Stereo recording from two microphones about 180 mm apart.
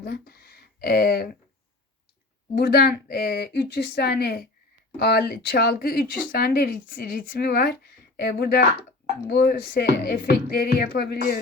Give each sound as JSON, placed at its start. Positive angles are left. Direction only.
{"t": 0.0, "sound": "speech", "side_deg": 60}
{"t": 2.6, "sound": "speech", "side_deg": 60}